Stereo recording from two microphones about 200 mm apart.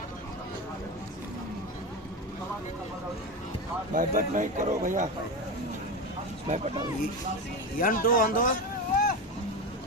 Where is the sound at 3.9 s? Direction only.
40° right (ahead or behind).